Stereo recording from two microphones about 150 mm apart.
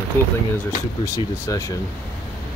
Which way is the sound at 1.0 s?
20° left (ahead or behind).